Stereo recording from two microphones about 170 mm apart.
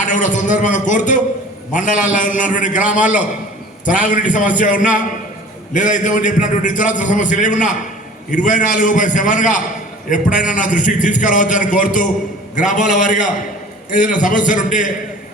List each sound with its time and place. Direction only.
0.0 s a man's voice: 45° left (ahead or behind)